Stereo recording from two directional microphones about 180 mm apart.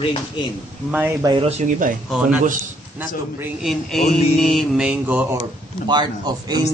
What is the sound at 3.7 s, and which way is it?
Mantra, centre (ahead or behind).